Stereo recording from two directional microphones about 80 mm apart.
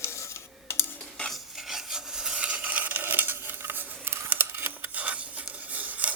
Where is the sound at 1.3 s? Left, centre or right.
Centre.